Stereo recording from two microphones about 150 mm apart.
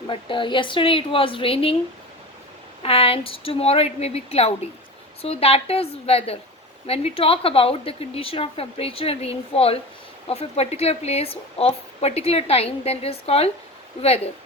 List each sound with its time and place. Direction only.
0.1 s a woman's voice: 35° left (ahead or behind)
2.8 s a woman's voice: 40° left (ahead or behind)